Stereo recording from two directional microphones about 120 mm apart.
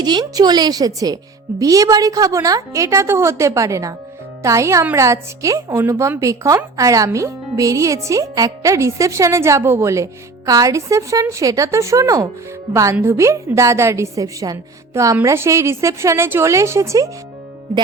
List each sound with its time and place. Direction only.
0.0 s speech: 35° right (ahead or behind)